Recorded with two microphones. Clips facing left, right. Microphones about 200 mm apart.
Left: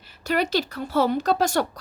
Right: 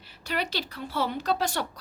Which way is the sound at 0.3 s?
45° left (ahead or behind).